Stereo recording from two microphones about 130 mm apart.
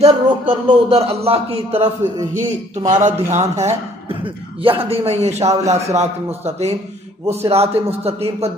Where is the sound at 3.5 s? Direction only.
60° right (ahead or behind).